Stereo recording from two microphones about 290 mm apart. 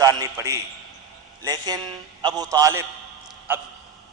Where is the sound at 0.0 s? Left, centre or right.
Centre.